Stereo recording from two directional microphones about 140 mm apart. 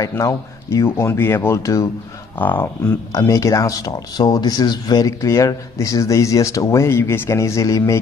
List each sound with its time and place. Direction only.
0.0 s speech: 20° left (ahead or behind)
2.8 s speech: 25° left (ahead or behind)